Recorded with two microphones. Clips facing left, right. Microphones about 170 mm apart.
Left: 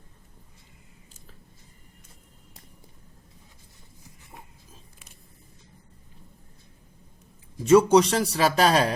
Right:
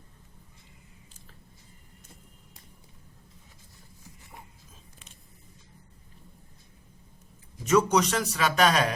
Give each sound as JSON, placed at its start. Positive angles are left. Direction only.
{"t": 7.6, "sound": "a man's voice", "side_deg": 30}